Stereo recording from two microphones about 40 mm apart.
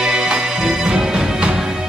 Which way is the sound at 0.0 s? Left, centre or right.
Centre.